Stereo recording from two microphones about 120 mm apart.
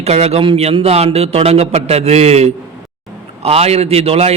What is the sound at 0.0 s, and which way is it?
A man's voice, 60° right (ahead or behind).